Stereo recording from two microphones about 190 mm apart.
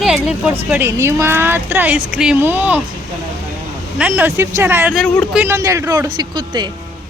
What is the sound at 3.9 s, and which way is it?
A woman's voice, 5° right (ahead or behind).